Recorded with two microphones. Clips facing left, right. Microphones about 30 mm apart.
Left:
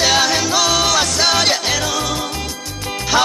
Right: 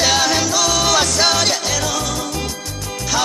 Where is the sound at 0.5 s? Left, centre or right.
Centre.